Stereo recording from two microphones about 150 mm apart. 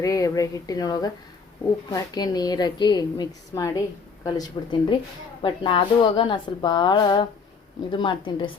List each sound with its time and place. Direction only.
0.0 s a woman's voice: 25° left (ahead or behind)